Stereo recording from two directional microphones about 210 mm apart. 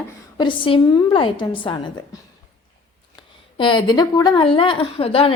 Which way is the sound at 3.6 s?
20° left (ahead or behind).